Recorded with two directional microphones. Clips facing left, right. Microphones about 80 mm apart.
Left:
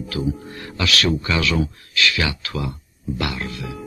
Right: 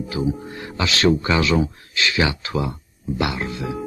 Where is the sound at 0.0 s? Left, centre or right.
Right.